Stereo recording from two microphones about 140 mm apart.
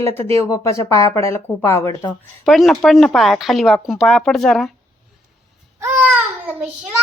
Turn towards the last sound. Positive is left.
turn(degrees=-10)  # may be behind; listen again after turning